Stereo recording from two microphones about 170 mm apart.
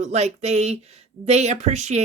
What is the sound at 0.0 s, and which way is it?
Speech, 40° right (ahead or behind).